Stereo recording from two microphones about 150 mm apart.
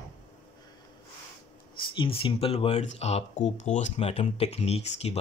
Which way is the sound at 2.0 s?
35° left (ahead or behind).